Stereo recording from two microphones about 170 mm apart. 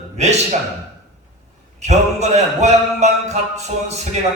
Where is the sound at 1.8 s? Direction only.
40° right (ahead or behind).